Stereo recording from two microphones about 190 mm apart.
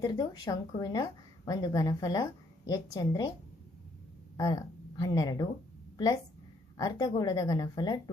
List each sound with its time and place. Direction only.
0.0 s a woman's voice: 20° left (ahead or behind)
4.4 s speech: 20° left (ahead or behind)
6.7 s a woman's voice: 20° left (ahead or behind)